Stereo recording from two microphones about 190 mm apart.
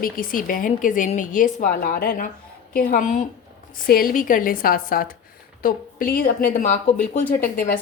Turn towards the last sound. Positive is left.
turn(degrees=50)  # may be behind; listen again after turning